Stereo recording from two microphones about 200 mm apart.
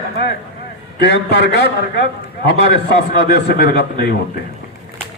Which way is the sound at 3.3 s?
55° left (ahead or behind).